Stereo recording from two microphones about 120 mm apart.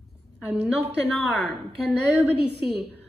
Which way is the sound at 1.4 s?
Centre (ahead or behind).